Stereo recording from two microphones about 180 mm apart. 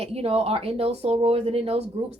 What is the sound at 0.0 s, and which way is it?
Speech, 35° right (ahead or behind).